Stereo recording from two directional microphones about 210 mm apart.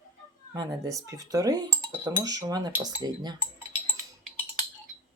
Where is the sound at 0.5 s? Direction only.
20° right (ahead or behind).